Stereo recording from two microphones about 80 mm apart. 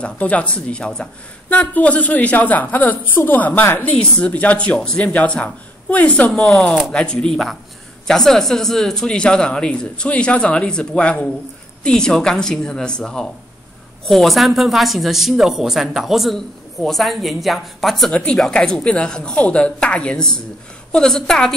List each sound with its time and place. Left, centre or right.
0.0 s a woman's voice: centre
3.9 s a woman's voice: centre
18.1 s speech: centre